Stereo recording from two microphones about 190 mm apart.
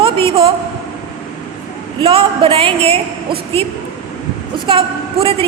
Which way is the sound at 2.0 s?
25° right (ahead or behind).